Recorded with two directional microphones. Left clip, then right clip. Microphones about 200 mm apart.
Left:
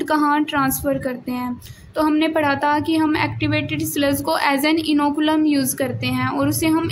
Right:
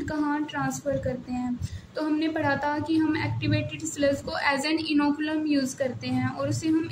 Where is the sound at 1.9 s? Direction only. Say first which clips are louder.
Left 9 dB; 35° left (ahead or behind).